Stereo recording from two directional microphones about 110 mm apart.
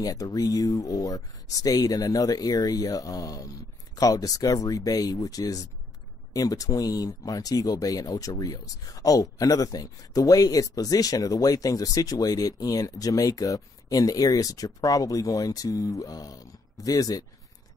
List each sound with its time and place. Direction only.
0.0 s speech: 35° left (ahead or behind)